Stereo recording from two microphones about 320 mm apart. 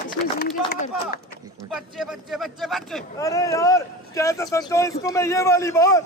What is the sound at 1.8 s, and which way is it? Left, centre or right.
A man's voice, centre.